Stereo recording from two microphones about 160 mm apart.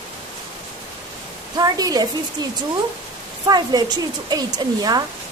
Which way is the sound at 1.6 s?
25° right (ahead or behind).